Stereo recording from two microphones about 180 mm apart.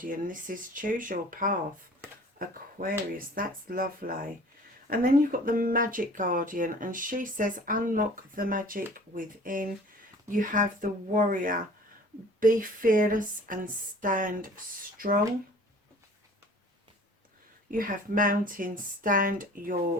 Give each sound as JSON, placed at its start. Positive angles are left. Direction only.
{"t": 0.0, "sound": "speech", "side_deg": -50}
{"t": 17.7, "sound": "speech", "side_deg": -50}